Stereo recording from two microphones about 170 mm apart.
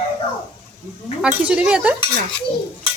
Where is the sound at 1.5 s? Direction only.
5° right (ahead or behind).